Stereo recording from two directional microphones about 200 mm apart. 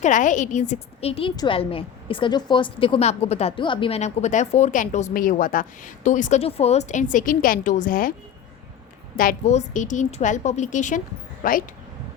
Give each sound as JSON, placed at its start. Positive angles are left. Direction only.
{"t": 0.0, "sound": "a woman's voice", "side_deg": 40}
{"t": 9.1, "sound": "a woman's voice", "side_deg": 40}